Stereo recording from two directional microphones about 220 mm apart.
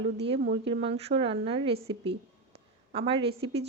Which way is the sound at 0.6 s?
25° right (ahead or behind).